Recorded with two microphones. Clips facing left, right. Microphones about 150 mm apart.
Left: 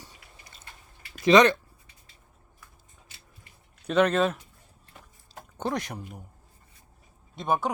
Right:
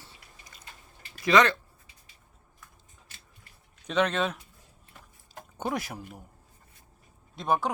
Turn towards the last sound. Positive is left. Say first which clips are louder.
# even
turn(degrees=0)  # may be behind; listen again after turning